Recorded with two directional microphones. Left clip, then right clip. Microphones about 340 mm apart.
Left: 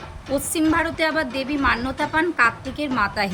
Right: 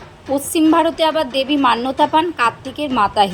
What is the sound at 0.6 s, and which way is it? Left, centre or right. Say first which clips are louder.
Speech: right 7 dB; right.